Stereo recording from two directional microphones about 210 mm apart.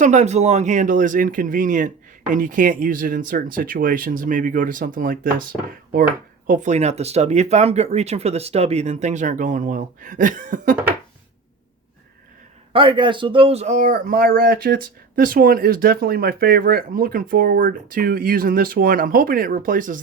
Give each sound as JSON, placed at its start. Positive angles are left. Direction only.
{"t": 0.0, "sound": "speech", "side_deg": -35}
{"t": 6.5, "sound": "speech", "side_deg": -35}
{"t": 12.7, "sound": "speech", "side_deg": -25}